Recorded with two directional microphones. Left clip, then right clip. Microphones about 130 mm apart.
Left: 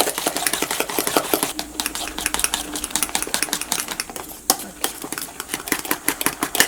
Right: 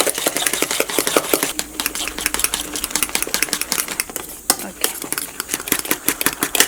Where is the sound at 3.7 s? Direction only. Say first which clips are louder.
Right 3 dB; 5° right (ahead or behind).